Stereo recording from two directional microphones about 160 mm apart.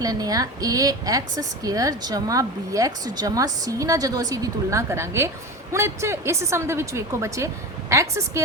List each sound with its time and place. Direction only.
0.0 s a woman's voice: 25° right (ahead or behind)